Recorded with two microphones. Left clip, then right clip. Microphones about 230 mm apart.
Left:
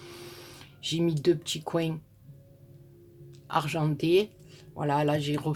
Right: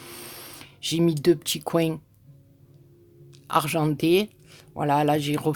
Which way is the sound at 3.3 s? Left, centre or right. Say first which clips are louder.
Right 6 dB; right.